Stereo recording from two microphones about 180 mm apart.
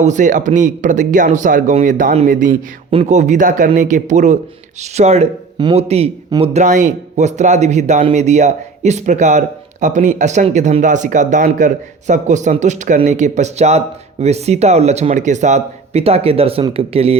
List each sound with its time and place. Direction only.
0.0 s a man's voice: 45° right (ahead or behind)